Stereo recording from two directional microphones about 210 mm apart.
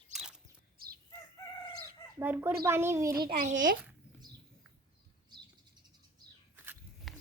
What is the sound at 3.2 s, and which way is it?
Speech, 40° right (ahead or behind).